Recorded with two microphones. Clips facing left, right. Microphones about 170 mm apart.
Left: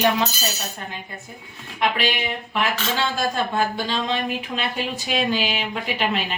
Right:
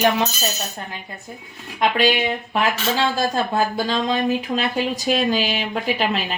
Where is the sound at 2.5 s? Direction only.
35° right (ahead or behind).